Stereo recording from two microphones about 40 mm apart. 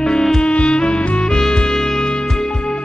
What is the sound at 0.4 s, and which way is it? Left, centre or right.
Music, left.